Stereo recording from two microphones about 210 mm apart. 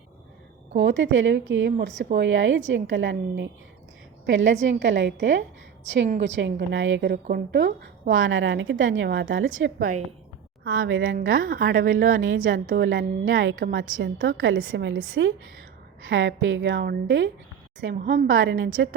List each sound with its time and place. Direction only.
0.8 s a woman's voice: 60° right (ahead or behind)
8.1 s a woman's voice: 70° right (ahead or behind)
9.7 s a woman's voice: 40° right (ahead or behind)
10.8 s a woman's voice: 70° right (ahead or behind)
11.4 s speech: 50° right (ahead or behind)
12.1 s a woman's voice: 70° right (ahead or behind)
12.5 s a woman's voice: 40° right (ahead or behind)
12.8 s a woman's voice: 60° right (ahead or behind)
13.7 s speech: 45° right (ahead or behind)
14.0 s a woman's voice: 60° right (ahead or behind)
17.9 s a woman's voice: 40° right (ahead or behind)
18.3 s a woman's voice: 70° right (ahead or behind)